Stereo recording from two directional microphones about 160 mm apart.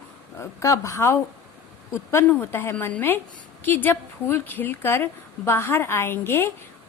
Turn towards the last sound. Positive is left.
turn(degrees=15)  # may be behind; listen again after turning